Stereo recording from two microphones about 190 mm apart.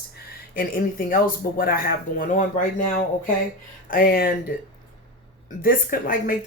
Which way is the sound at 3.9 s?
50° left (ahead or behind).